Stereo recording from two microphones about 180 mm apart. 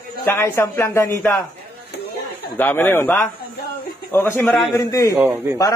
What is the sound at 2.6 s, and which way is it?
A man's voice, 10° left (ahead or behind).